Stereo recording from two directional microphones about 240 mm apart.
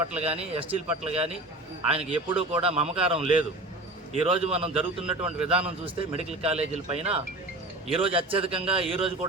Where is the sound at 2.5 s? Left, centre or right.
Right.